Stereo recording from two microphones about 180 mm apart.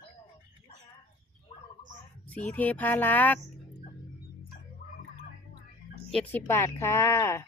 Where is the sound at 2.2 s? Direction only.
5° left (ahead or behind).